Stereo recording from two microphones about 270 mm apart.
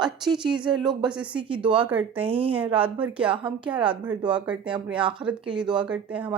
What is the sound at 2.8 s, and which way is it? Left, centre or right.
Speech, centre.